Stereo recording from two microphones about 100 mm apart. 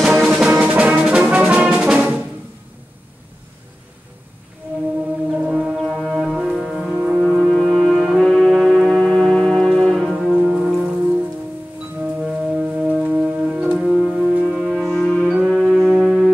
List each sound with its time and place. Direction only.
0.0 s music: 5° right (ahead or behind)
5.3 s brass instrument: 15° right (ahead or behind)
5.8 s brass instrument: 5° left (ahead or behind)
6.5 s music: centre (ahead or behind)
8.2 s music: 5° left (ahead or behind)
10.3 s music: 10° right (ahead or behind)
12.0 s music: 10° right (ahead or behind)